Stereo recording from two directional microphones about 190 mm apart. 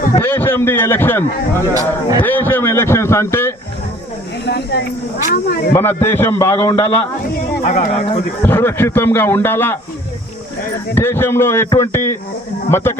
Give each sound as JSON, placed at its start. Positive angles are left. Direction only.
{"t": 0.2, "sound": "speech", "side_deg": 10}
{"t": 1.7, "sound": "a man's voice", "side_deg": -20}
{"t": 2.2, "sound": "speech", "side_deg": 10}
{"t": 4.4, "sound": "speech", "side_deg": 60}
{"t": 5.7, "sound": "speech", "side_deg": 10}
{"t": 7.7, "sound": "speech", "side_deg": 35}
{"t": 8.4, "sound": "speech", "side_deg": 10}
{"t": 10.9, "sound": "speech", "side_deg": 10}